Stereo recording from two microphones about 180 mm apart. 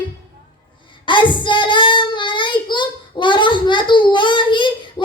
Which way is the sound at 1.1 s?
25° left (ahead or behind).